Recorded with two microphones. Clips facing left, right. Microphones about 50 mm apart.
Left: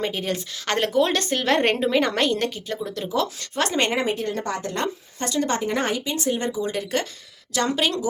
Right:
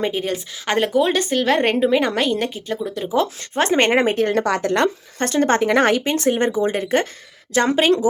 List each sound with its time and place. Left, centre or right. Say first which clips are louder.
0.0 s a woman's voice: right 4 dB; centre
3.2 s speech: right 5 dB; right
4.3 s speech: right 8 dB; right
5.2 s speech: right 7 dB; right
5.6 s speech: right 8 dB; right